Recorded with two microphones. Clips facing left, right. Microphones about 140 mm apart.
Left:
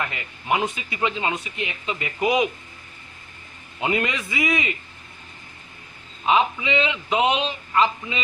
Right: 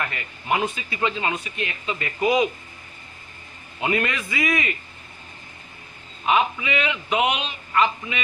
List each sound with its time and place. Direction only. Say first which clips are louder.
0.1 s speech: left 1 dB; 20° left (ahead or behind)
3.8 s speech: even; 20° left (ahead or behind)
6.2 s speech: left 1 dB; 25° left (ahead or behind)